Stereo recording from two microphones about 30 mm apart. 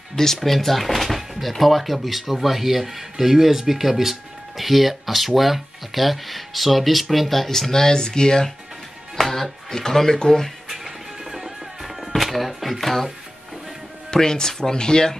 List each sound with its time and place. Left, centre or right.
0.1 s speech: centre
9.1 s speech: centre
11.3 s music: centre
14.1 s speech: centre